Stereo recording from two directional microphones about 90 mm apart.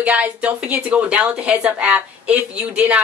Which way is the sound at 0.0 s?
15° right (ahead or behind).